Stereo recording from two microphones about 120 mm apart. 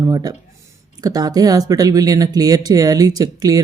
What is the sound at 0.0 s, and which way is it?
Speech, 35° right (ahead or behind).